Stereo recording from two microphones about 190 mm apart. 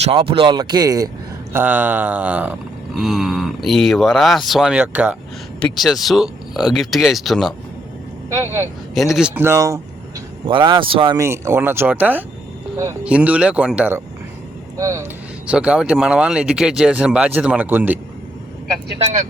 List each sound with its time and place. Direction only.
0.0 s speech: 25° right (ahead or behind); by 5.1 s 10° right (ahead or behind)
5.5 s speech: centre (ahead or behind)
9.0 s speech: centre (ahead or behind)